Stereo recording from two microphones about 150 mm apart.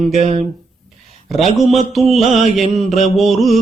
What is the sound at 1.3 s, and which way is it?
Mantra, centre (ahead or behind).